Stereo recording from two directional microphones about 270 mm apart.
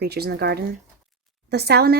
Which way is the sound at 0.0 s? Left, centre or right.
Right.